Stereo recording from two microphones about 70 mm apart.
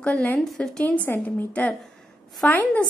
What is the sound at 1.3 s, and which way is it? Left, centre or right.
A woman's voice, left.